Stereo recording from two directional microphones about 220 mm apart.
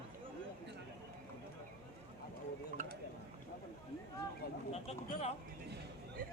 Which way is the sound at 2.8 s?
35° right (ahead or behind).